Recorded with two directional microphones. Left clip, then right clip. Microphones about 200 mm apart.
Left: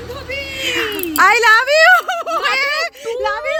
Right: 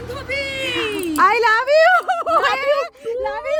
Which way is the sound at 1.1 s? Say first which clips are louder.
Left 4 dB; 5° right (ahead or behind).